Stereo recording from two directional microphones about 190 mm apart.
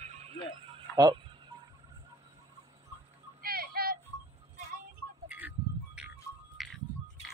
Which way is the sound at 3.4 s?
55° right (ahead or behind).